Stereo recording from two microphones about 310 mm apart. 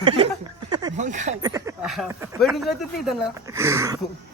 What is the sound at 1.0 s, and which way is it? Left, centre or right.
Speech, right.